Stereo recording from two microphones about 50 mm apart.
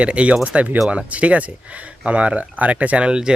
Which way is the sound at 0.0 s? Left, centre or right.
Right.